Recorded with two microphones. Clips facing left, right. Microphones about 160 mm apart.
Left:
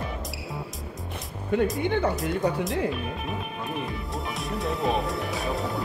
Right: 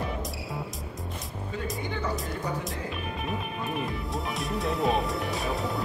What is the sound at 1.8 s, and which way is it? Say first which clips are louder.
Speech: left 8 dB; 65° left (ahead or behind).